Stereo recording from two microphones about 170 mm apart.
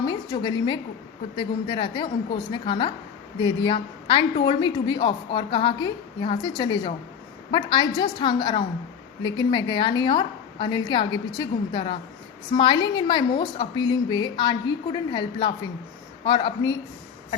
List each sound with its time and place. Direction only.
0.0 s a woman's voice: 25° left (ahead or behind)